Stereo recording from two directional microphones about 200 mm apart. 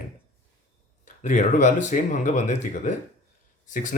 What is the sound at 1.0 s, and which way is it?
Speech, 35° left (ahead or behind).